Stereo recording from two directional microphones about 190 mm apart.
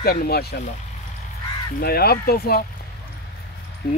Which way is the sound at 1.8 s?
55° left (ahead or behind).